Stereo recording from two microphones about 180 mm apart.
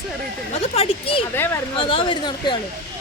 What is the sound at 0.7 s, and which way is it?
Speech, 30° left (ahead or behind).